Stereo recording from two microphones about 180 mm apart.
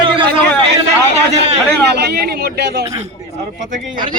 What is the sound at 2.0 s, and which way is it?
Speech, 65° right (ahead or behind).